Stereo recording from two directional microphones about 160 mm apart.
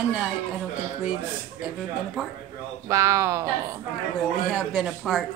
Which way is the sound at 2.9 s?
15° right (ahead or behind).